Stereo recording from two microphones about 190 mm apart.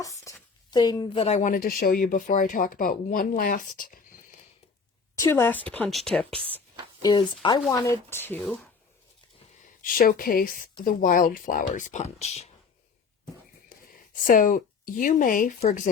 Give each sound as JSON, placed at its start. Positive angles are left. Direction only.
{"t": 0.0, "sound": "a sound", "side_deg": 15}
{"t": 0.7, "sound": "speech", "side_deg": 20}
{"t": 5.1, "sound": "a woman's voice", "side_deg": 15}
{"t": 7.0, "sound": "a woman's voice", "side_deg": 20}
{"t": 9.8, "sound": "speech", "side_deg": 50}
{"t": 13.7, "sound": "speech", "side_deg": 45}